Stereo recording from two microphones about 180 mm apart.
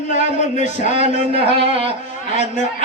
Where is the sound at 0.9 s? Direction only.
30° right (ahead or behind).